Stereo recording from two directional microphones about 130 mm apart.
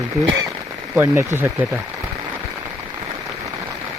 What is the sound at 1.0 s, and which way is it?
Speech, 20° right (ahead or behind).